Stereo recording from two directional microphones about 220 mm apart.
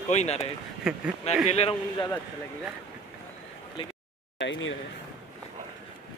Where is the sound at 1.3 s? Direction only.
30° left (ahead or behind).